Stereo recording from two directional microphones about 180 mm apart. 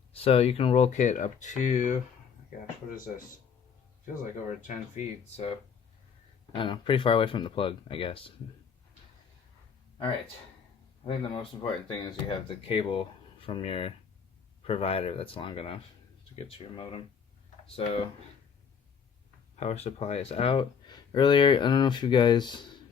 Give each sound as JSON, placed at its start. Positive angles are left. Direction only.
{"t": 0.1, "sound": "speech", "side_deg": 35}
{"t": 4.0, "sound": "speech", "side_deg": 45}
{"t": 11.0, "sound": "speech", "side_deg": 30}
{"t": 19.5, "sound": "speech", "side_deg": 40}